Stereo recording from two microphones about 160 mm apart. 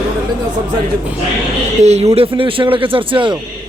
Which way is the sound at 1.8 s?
45° right (ahead or behind).